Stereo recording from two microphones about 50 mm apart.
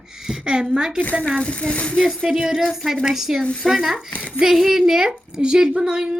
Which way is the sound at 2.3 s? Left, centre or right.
Centre.